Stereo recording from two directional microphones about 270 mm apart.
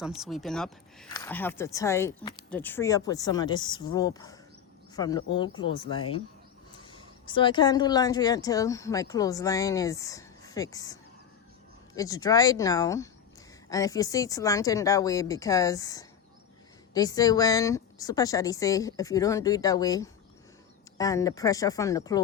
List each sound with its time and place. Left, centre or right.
0.0 s speech: centre
11.9 s speech: centre